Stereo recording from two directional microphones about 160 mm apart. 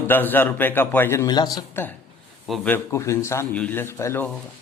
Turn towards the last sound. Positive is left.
turn(degrees=15)  # may be behind; listen again after turning